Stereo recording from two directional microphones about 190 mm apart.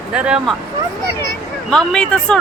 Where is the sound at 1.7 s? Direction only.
5° left (ahead or behind).